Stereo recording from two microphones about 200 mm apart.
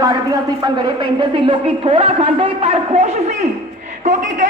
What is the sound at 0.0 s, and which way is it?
A man's voice, 20° right (ahead or behind).